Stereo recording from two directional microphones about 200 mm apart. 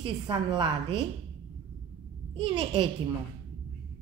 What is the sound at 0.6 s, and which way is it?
Speech, 25° right (ahead or behind).